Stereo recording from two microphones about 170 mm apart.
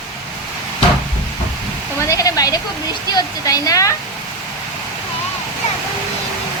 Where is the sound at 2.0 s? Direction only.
20° left (ahead or behind).